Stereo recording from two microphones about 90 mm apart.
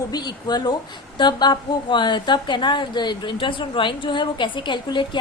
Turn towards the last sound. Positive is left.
turn(degrees=60)  # may be behind; listen again after turning